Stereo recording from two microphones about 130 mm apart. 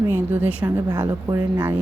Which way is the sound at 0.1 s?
15° right (ahead or behind).